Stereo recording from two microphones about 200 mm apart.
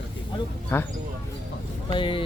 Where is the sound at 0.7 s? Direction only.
10° left (ahead or behind).